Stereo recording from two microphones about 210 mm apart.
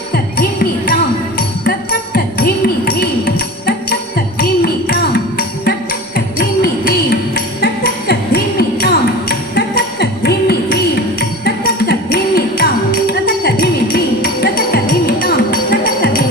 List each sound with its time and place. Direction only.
0.1 s music: 45° left (ahead or behind)